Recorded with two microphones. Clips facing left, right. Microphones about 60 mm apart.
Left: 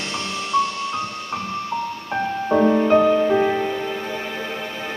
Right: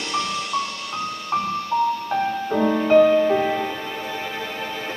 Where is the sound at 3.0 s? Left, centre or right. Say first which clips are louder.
Even; centre.